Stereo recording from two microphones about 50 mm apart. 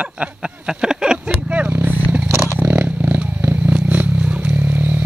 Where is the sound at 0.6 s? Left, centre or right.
Centre.